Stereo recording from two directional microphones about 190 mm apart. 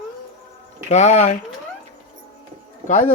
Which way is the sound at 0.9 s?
35° left (ahead or behind).